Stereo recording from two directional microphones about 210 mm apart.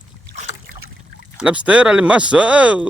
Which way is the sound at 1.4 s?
5° right (ahead or behind).